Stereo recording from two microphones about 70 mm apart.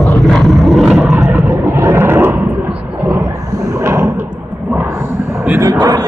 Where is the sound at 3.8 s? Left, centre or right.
Right.